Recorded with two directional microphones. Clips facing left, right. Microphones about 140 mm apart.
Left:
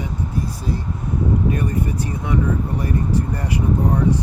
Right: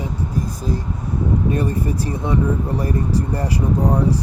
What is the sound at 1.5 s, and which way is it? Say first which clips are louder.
Speech: right 1 dB; 30° right (ahead or behind).